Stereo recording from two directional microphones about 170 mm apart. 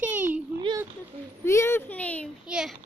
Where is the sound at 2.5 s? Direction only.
5° right (ahead or behind).